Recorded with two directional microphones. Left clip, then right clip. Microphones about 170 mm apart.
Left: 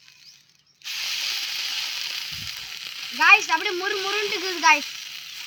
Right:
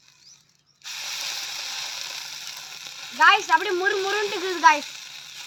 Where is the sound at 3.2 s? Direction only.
15° left (ahead or behind).